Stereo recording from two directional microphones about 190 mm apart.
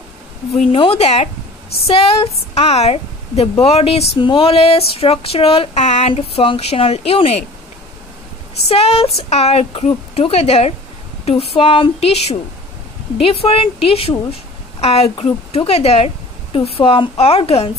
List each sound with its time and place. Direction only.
0.6 s a woman's voice: 30° left (ahead or behind)
8.6 s a woman's voice: 30° left (ahead or behind)